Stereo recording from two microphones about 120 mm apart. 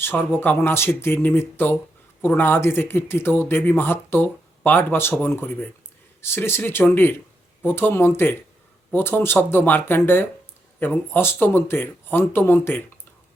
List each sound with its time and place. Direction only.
0.0 s speech: 15° left (ahead or behind)